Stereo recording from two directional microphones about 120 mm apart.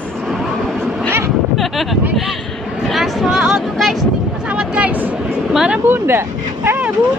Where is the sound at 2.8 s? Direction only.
Centre (ahead or behind).